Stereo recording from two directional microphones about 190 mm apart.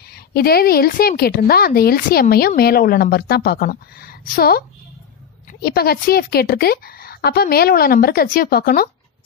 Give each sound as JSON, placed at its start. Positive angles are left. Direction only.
{"t": 0.1, "sound": "a woman's voice", "side_deg": 55}